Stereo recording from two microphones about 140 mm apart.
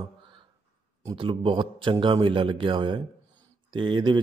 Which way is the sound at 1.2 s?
35° right (ahead or behind).